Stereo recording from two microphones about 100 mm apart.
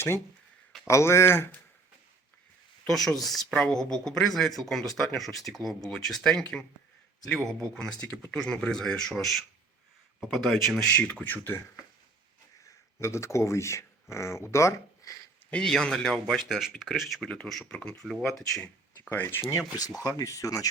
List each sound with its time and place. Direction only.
0.9 s speech: 30° left (ahead or behind)
2.8 s speech: 5° left (ahead or behind); by 11.6 s 20° left (ahead or behind)
12.6 s speech: 30° left (ahead or behind)
15.4 s speech: 10° left (ahead or behind)
17.2 s speech: 10° left (ahead or behind)
18.6 s speech: 15° left (ahead or behind); by 20.7 s 35° left (ahead or behind)